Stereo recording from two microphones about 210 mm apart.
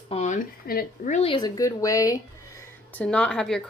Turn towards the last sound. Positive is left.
turn(degrees=5)  # may be behind; listen again after turning